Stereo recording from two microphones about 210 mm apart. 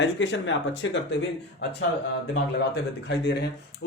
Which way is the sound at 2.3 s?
55° left (ahead or behind).